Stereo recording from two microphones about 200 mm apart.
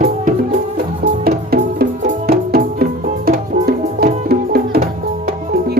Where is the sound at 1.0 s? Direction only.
45° right (ahead or behind).